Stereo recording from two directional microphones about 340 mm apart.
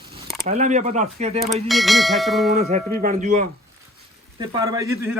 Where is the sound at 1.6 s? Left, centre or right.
Centre.